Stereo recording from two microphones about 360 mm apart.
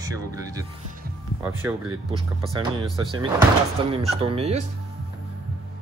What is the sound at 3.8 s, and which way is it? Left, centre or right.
Speech, centre.